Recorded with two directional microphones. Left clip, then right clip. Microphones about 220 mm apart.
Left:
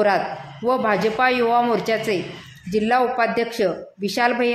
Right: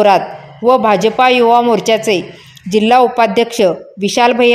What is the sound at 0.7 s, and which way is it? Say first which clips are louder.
Speech: right 9 dB; 30° right (ahead or behind).